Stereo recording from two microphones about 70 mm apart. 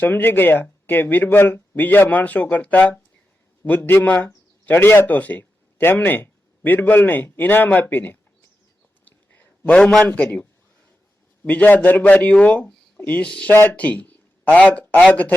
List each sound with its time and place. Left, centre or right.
0.0 s a man's voice: left
9.0 s a sound: left
11.4 s speech: left